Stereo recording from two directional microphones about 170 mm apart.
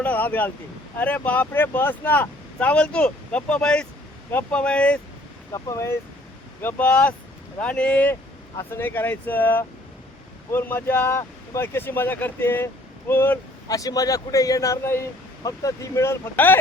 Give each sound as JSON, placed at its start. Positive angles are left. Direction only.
{"t": 0.0, "sound": "speech", "side_deg": 10}
{"t": 5.5, "sound": "speech", "side_deg": 20}